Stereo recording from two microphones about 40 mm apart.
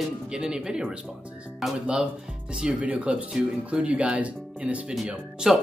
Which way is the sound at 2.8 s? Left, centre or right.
Right.